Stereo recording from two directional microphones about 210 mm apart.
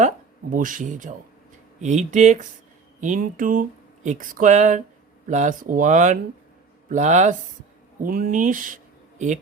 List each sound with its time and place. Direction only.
0.5 s speech: 40° right (ahead or behind)